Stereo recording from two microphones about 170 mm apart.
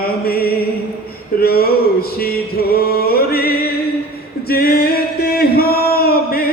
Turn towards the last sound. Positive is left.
turn(degrees=65)  # may be behind; listen again after turning